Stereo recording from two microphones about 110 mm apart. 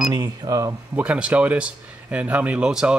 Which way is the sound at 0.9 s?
10° right (ahead or behind).